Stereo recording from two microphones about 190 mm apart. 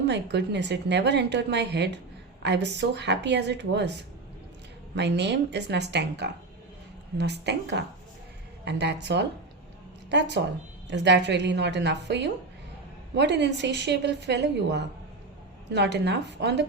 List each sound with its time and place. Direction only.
0.0 s a woman's voice: 65° right (ahead or behind)